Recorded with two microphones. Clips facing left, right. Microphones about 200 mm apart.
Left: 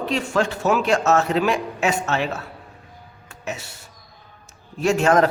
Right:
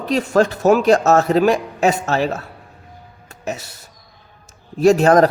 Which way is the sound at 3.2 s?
40° right (ahead or behind).